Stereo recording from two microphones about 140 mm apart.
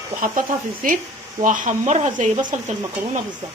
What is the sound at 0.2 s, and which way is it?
Speech, 75° right (ahead or behind).